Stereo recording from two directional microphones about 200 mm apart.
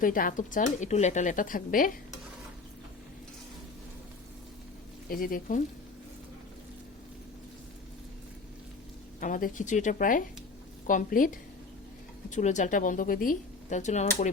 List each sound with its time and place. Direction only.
0.0 s speech: 45° left (ahead or behind)
5.0 s speech: 45° left (ahead or behind)
9.2 s speech: 40° left (ahead or behind)
12.3 s speech: 35° left (ahead or behind)